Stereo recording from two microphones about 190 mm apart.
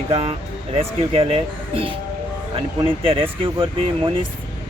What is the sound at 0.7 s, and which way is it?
Speech, 30° right (ahead or behind).